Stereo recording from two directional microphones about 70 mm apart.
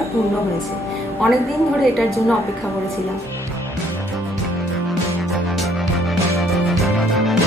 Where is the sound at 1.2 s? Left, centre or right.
Centre.